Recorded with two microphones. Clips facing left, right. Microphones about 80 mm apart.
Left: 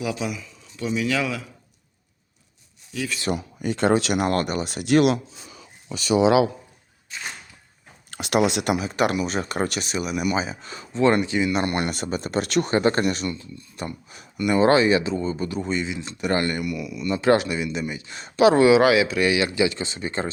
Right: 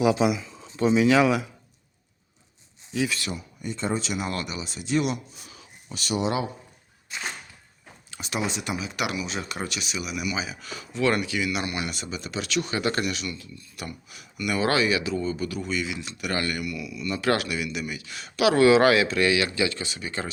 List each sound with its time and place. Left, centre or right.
0.0 s speech: right
2.9 s speech: right
3.3 s speech: left
8.1 s speech: left
8.8 s speech: left
11.6 s speech: left
18.8 s speech: centre; by 20.3 s left